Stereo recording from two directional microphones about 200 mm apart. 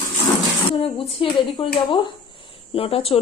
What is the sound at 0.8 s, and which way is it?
A woman's voice, 25° left (ahead or behind).